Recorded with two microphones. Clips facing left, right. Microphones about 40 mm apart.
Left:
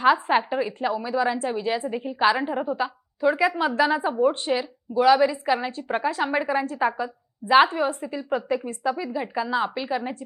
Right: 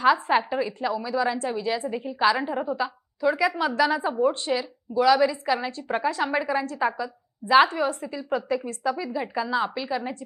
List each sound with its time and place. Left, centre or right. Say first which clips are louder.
0.0 s a woman's voice: left 1 dB; left
2.6 s a woman's voice: left 1 dB; left
7.5 s a woman's voice: left 1 dB; centre
9.0 s a woman's voice: left 1 dB; centre